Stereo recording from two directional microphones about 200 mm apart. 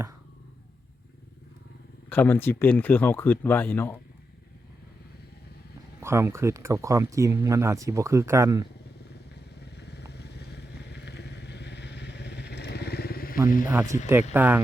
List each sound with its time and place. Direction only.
2.0 s speech: 10° left (ahead or behind)
6.0 s speech: 15° right (ahead or behind)
9.6 s vehicle: 55° left (ahead or behind)
13.7 s speech: 15° right (ahead or behind)